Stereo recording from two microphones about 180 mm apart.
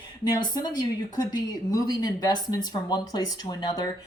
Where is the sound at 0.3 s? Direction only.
25° left (ahead or behind).